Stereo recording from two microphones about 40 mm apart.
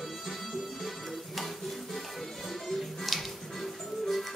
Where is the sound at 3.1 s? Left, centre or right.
Centre.